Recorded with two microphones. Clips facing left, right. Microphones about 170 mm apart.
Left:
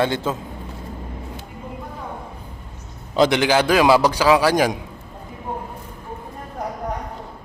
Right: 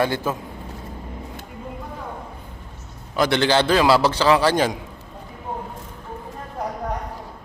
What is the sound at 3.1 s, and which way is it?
Speech, 25° left (ahead or behind).